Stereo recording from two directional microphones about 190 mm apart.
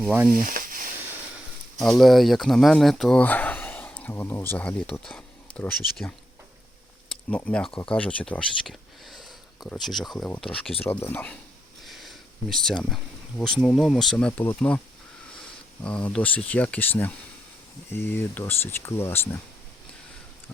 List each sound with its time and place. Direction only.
0.0 s speech: 5° right (ahead or behind)
0.3 s a sound: 45° right (ahead or behind)
2.0 s speech: centre (ahead or behind)
7.1 s speech: 10° left (ahead or behind)
11.8 s a sound: centre (ahead or behind)
13.6 s speech: centre (ahead or behind)
15.8 s speech: 5° left (ahead or behind)